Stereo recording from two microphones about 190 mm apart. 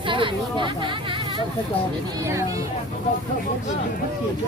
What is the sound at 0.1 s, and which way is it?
Speech, 25° right (ahead or behind).